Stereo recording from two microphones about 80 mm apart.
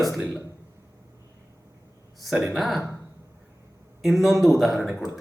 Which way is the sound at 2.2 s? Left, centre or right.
Centre.